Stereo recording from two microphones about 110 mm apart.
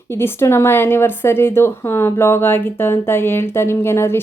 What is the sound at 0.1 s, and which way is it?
Speech, 20° left (ahead or behind).